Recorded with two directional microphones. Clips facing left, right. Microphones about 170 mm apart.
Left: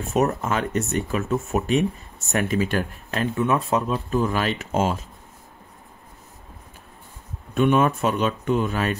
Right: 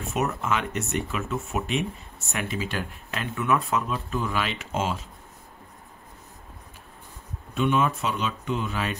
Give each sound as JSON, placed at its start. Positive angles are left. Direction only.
{"t": 0.1, "sound": "speech", "side_deg": 40}
{"t": 7.5, "sound": "speech", "side_deg": 50}